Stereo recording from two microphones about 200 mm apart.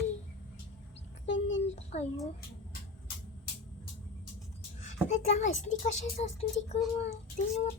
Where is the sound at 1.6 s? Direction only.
35° left (ahead or behind).